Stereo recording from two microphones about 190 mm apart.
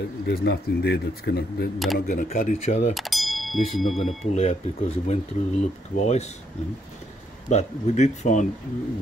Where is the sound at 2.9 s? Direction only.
Centre (ahead or behind).